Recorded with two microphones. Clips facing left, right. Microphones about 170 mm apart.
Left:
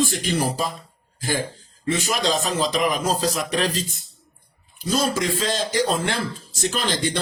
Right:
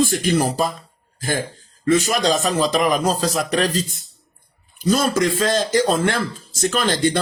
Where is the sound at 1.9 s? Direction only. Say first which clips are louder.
Right 5 dB; 45° right (ahead or behind).